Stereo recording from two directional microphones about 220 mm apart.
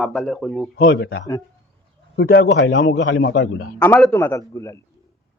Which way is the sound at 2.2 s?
50° left (ahead or behind).